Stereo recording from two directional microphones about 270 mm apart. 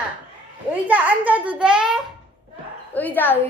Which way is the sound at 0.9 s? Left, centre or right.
Centre.